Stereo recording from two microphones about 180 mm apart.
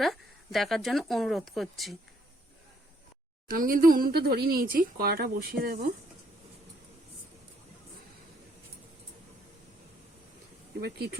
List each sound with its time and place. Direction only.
0.0 s speech: centre (ahead or behind)
3.5 s speech: 50° right (ahead or behind)
10.8 s speech: 60° right (ahead or behind)